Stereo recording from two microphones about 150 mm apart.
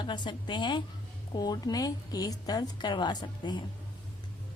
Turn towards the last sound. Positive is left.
turn(degrees=30)  # may be behind; listen again after turning